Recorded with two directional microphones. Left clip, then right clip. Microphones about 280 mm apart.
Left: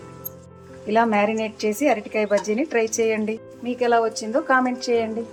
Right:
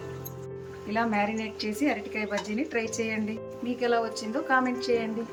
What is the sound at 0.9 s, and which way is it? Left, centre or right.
A woman's voice, left.